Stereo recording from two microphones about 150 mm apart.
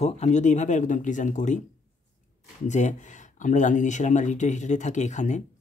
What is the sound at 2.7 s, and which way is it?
Speech, 50° left (ahead or behind).